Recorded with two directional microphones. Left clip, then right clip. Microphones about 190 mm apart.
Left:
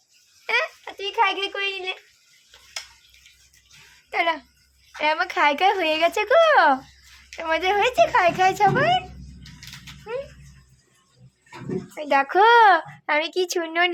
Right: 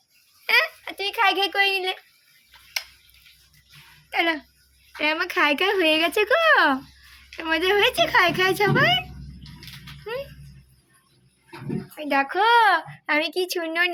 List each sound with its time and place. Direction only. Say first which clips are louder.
0.4 s a sound: right 3 dB; 5° left (ahead or behind)
4.1 s a child's voice: even; 20° left (ahead or behind)
11.9 s a child's voice: left 4 dB; 30° left (ahead or behind)